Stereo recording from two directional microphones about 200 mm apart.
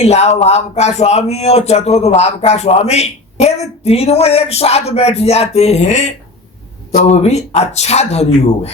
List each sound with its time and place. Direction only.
0.0 s speech: 35° left (ahead or behind)